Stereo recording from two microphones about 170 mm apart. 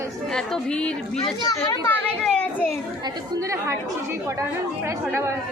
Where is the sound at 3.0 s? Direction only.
20° right (ahead or behind).